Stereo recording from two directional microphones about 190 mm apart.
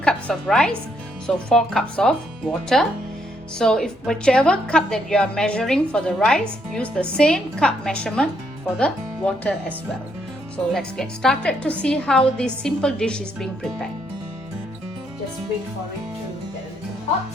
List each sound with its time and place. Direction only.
0.0 s a woman's voice: 5° left (ahead or behind)
10.7 s a woman's voice: centre (ahead or behind)